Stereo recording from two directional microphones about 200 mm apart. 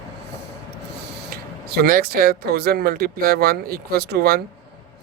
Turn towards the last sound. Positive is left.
turn(degrees=-50)  # may be behind; listen again after turning